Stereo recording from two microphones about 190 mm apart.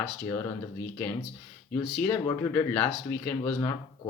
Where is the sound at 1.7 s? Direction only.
10° left (ahead or behind).